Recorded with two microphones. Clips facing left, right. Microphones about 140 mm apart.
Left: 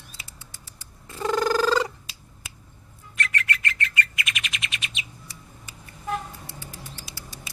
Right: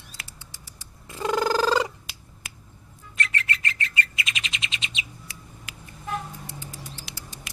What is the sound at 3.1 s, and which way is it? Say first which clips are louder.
Bird: left 1 dB; 30° right (ahead or behind).